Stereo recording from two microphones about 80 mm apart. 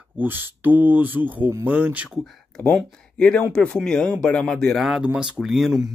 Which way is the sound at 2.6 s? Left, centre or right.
Centre.